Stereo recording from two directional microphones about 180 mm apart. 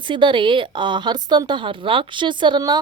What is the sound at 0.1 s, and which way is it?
A woman's voice, 25° right (ahead or behind).